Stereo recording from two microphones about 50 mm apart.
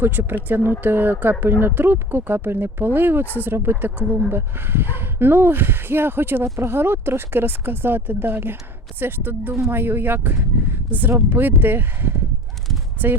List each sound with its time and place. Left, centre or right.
0.0 s speech: right